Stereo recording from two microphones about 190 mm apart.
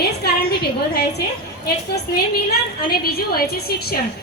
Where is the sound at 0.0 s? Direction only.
55° left (ahead or behind).